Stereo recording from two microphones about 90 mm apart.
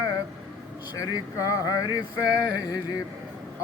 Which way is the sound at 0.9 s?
40° left (ahead or behind).